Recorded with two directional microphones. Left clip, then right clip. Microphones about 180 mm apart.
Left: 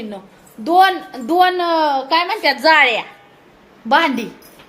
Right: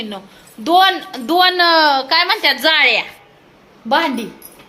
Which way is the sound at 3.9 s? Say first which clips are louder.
Left 1 dB; 15° left (ahead or behind).